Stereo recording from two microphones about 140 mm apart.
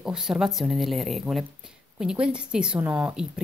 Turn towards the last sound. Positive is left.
turn(degrees=-5)  # may be behind; listen again after turning